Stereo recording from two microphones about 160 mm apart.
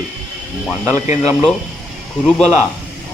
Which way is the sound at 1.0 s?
45° left (ahead or behind).